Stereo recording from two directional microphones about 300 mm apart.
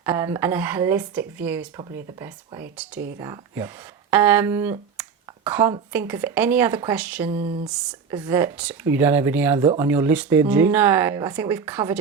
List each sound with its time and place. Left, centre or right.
0.0 s speech: centre
7.3 s speech: centre